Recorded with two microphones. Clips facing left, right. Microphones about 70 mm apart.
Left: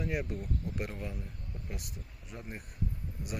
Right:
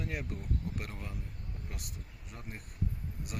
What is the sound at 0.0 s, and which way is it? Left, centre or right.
Speech, centre.